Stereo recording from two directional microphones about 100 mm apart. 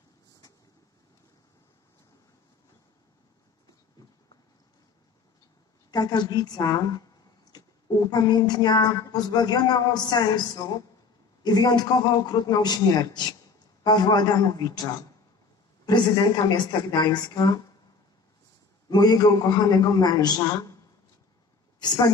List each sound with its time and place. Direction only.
5.9 s a man's voice: 45° left (ahead or behind)
7.5 s a sound: 40° left (ahead or behind)
8.1 s a woman's voice: 45° left (ahead or behind)
18.9 s a man's voice: 45° left (ahead or behind)
21.7 s speech: 45° left (ahead or behind)